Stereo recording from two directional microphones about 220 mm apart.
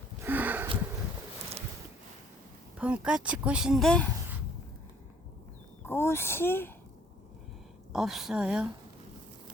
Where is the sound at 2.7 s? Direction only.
5° right (ahead or behind).